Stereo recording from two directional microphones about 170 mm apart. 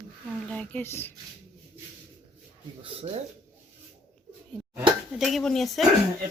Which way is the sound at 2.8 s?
35° right (ahead or behind).